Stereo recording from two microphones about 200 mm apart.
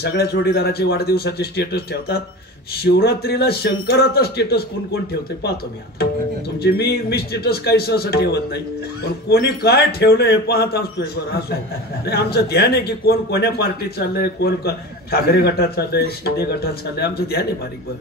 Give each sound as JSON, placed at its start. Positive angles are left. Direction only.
{"t": 0.0, "sound": "a man's voice", "side_deg": 50}
{"t": 6.6, "sound": "a man's voice", "side_deg": 55}